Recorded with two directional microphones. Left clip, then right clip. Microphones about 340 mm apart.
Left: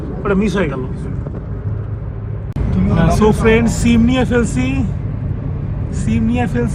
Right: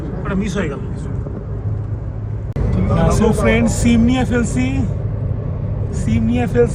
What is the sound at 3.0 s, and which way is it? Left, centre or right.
Speech, centre.